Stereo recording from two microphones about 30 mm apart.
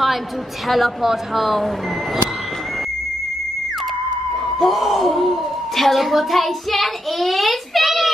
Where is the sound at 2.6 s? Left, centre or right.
Centre.